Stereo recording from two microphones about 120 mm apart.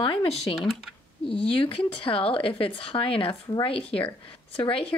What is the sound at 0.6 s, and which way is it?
Computer keyboard, centre (ahead or behind).